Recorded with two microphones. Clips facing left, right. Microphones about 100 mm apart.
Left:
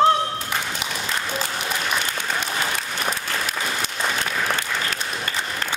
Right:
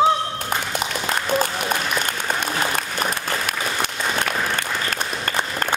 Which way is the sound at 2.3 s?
50° right (ahead or behind).